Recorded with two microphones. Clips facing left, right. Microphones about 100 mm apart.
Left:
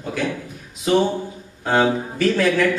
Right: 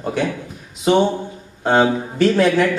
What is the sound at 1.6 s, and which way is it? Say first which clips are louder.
A man's voice: right 3 dB; 25° right (ahead or behind).